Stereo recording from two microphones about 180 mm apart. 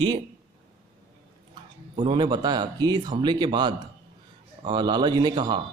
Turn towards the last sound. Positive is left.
turn(degrees=-25)  # may be behind; listen again after turning